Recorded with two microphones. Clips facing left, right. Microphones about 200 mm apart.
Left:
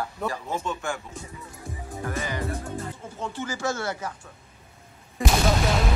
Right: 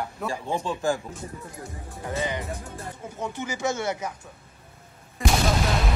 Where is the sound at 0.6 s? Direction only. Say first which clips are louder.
Right 5 dB; 35° right (ahead or behind).